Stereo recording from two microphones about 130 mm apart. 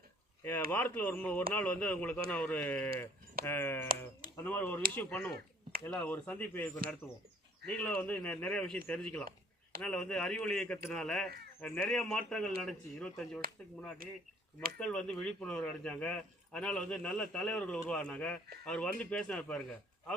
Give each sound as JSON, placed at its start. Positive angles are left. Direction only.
{"t": 0.4, "sound": "speech", "side_deg": 15}
{"t": 14.8, "sound": "speech", "side_deg": 5}